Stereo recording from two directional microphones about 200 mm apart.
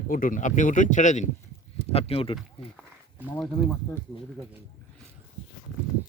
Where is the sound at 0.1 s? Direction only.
45° left (ahead or behind).